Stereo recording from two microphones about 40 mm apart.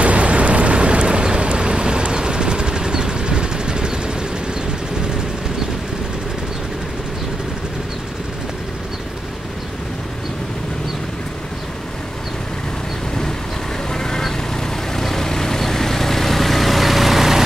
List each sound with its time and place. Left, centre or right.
0.0 s vehicle: right
13.9 s duck: centre
15.0 s vehicle: centre